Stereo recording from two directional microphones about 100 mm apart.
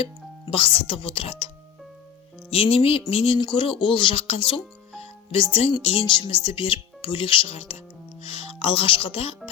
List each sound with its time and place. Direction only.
0.0 s speech: 65° left (ahead or behind)
2.5 s speech: 70° left (ahead or behind); by 7.8 s 85° left
8.2 s music: 90° left; by 9.3 s 70° left (ahead or behind)